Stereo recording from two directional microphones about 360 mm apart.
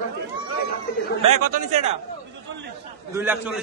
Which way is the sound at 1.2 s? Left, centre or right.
Right.